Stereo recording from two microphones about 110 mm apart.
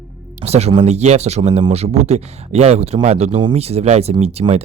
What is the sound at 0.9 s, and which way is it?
Speech, 85° right.